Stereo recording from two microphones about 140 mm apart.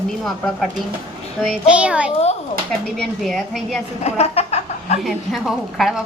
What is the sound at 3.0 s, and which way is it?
Speech, centre (ahead or behind).